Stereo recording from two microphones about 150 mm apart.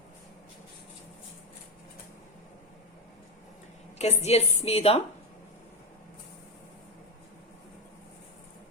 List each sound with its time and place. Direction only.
3.9 s a woman's voice: 45° left (ahead or behind)